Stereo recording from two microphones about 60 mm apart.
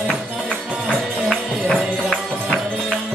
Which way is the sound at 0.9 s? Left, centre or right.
Right.